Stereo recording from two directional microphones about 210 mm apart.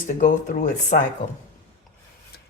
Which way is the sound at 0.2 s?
35° left (ahead or behind).